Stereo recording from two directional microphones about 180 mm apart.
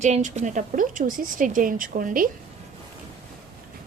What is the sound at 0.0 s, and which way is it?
Speech, 40° right (ahead or behind).